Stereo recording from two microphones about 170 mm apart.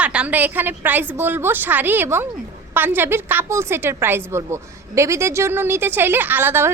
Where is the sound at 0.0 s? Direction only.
5° right (ahead or behind).